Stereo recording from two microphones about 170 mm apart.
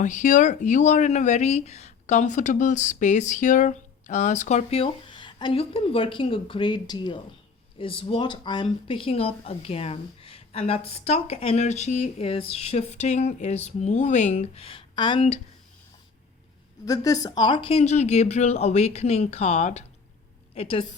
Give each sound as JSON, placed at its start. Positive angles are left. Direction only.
{"t": 0.0, "sound": "speech", "side_deg": 45}
{"t": 16.8, "sound": "speech", "side_deg": 20}